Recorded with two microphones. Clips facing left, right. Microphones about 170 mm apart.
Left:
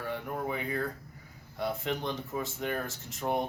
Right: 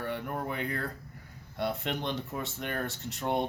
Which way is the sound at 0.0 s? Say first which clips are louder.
Even; 60° right (ahead or behind).